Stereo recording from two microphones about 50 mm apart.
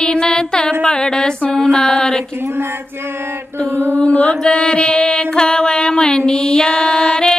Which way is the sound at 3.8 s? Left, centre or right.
Right.